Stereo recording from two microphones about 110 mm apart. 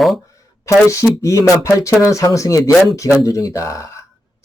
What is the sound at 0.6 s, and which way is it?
Speech, 30° left (ahead or behind).